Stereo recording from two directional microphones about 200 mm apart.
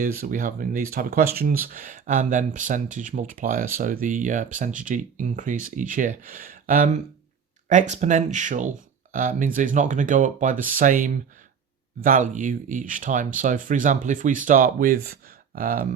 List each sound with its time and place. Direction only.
0.0 s speech: 45° right (ahead or behind)